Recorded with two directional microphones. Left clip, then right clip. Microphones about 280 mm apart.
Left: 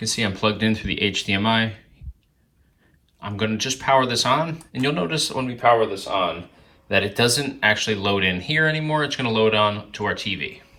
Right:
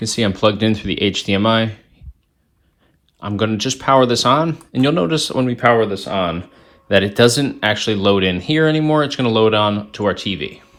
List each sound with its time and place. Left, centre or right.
0.0 s speech: right
3.2 s speech: centre; by 6.2 s right
7.0 s speech: right